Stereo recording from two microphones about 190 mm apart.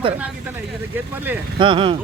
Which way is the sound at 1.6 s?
25° right (ahead or behind).